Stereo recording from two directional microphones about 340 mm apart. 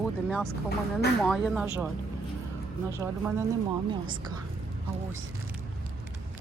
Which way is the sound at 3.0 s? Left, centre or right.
Centre.